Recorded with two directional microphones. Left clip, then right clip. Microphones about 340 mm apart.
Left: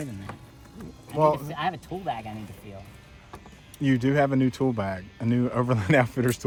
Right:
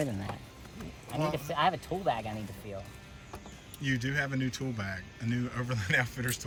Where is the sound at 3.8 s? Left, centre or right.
Centre.